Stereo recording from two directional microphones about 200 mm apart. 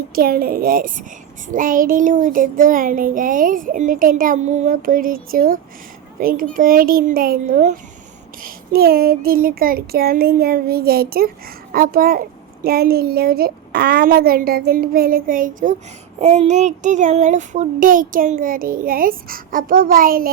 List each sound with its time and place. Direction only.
0.1 s child singing: 50° right (ahead or behind)